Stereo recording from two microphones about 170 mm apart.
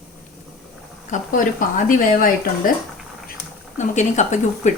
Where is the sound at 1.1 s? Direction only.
50° left (ahead or behind).